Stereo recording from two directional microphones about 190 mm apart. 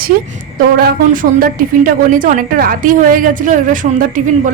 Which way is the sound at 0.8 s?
45° right (ahead or behind).